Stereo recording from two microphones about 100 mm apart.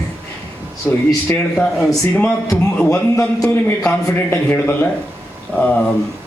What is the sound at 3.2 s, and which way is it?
Speech, 35° left (ahead or behind).